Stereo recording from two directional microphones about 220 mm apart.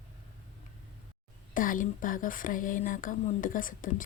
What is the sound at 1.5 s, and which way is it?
Speech, 40° left (ahead or behind).